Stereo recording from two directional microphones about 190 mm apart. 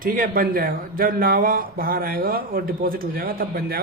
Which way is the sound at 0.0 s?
50° right (ahead or behind).